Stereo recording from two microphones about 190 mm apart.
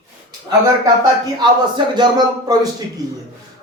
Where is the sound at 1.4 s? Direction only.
25° right (ahead or behind).